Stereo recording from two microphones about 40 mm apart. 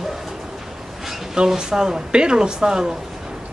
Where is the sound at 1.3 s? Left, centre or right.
Centre.